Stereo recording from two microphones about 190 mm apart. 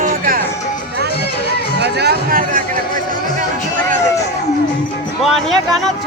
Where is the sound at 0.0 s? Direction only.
50° right (ahead or behind).